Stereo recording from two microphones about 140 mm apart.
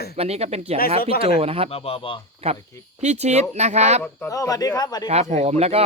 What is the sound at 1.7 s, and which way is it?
Speech, 45° left (ahead or behind).